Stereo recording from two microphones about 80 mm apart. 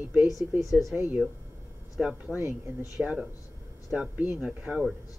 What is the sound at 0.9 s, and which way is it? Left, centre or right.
Speech, right.